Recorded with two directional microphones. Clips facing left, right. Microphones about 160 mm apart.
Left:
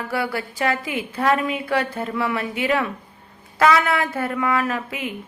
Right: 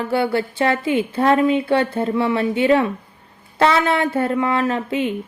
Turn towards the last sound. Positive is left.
turn(degrees=-30)  # may be behind; listen again after turning